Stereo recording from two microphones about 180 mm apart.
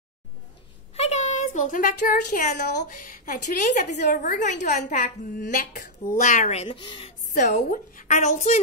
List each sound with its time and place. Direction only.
0.9 s a woman's voice: 35° left (ahead or behind)
7.3 s a woman's voice: 40° left (ahead or behind)